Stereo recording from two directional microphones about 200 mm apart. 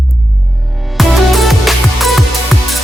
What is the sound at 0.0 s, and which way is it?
Music, centre (ahead or behind).